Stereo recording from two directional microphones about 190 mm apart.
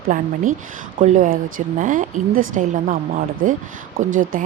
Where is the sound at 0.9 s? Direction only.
40° right (ahead or behind).